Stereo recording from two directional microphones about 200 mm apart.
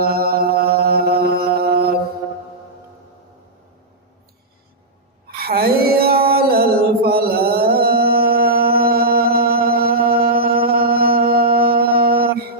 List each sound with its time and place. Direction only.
0.0 s mantra: 50° right (ahead or behind)
5.4 s music: 50° right (ahead or behind)